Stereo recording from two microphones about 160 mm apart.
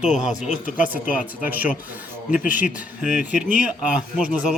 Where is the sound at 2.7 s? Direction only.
10° right (ahead or behind).